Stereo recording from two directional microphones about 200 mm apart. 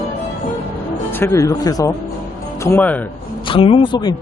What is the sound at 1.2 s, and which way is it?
Speech, 15° left (ahead or behind).